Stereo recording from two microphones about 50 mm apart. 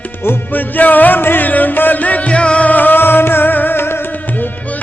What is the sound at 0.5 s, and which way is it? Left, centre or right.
Music, left.